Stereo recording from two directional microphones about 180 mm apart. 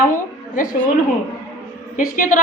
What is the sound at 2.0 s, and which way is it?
Speech, 50° left (ahead or behind).